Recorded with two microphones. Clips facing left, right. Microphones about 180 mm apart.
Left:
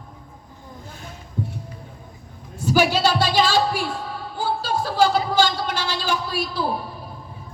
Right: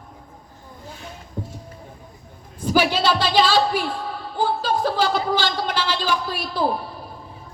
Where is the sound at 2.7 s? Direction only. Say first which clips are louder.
Even; 45° left (ahead or behind).